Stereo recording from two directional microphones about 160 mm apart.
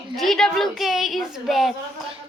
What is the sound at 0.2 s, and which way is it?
A woman's voice, centre (ahead or behind).